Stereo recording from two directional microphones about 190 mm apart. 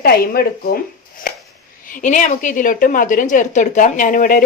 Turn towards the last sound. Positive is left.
turn(degrees=45)  # may be behind; listen again after turning